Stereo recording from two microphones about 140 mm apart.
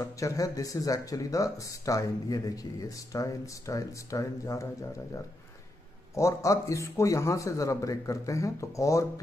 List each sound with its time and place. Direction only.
0.0 s speech: 25° left (ahead or behind)
6.1 s speech: 20° left (ahead or behind)